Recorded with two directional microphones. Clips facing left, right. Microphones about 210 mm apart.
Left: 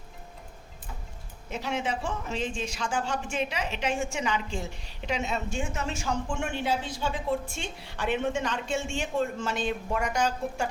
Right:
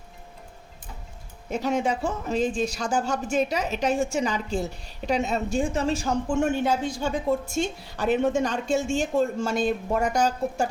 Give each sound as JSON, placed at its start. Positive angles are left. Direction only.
{"t": 1.5, "sound": "a woman's voice", "side_deg": -45}